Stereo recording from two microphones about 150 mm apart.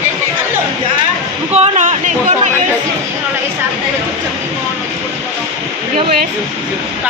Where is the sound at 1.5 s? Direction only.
50° right (ahead or behind).